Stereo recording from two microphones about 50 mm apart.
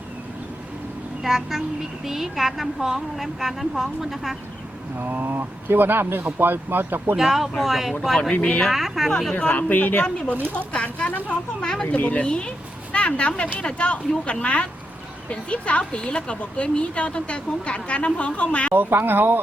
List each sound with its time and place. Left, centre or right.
1.2 s a woman's voice: centre
4.9 s speech: right
7.2 s a woman's voice: centre
8.3 s speech: left
8.7 s a woman's voice: centre
9.3 s speech: left
11.3 s speech: centre
18.7 s speech: right